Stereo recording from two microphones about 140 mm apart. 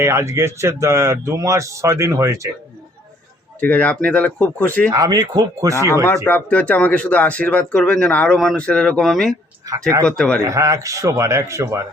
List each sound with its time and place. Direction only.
0.0 s speech: 20° right (ahead or behind)
3.6 s speech: 10° left (ahead or behind)
4.9 s speech: 25° right (ahead or behind)
6.2 s speech: 10° left (ahead or behind)
10.4 s speech: 20° right (ahead or behind)